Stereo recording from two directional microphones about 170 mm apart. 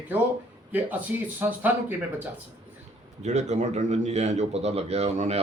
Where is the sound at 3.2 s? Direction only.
45° right (ahead or behind).